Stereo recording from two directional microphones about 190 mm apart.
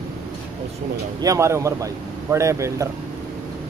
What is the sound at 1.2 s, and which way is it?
Speech, 15° right (ahead or behind).